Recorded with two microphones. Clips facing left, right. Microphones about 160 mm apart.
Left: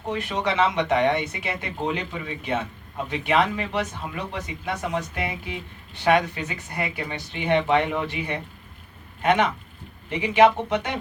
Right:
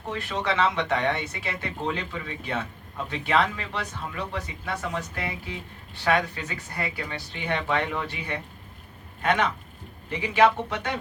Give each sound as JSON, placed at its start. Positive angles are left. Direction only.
{"t": 0.1, "sound": "speech", "side_deg": 20}